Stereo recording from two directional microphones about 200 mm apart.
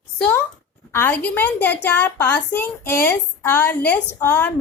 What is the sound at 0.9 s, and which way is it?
A woman's voice, 10° left (ahead or behind).